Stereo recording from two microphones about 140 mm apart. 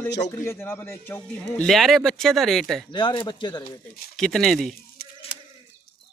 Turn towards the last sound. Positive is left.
turn(degrees=0)  # may be behind; listen again after turning